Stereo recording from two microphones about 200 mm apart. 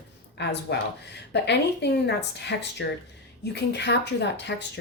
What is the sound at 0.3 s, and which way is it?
Speech, 60° left (ahead or behind).